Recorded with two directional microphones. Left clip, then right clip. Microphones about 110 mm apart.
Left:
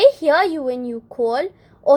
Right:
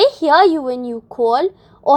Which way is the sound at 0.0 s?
40° right (ahead or behind).